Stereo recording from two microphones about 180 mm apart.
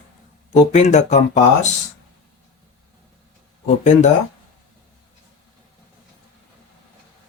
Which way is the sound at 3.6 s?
40° left (ahead or behind).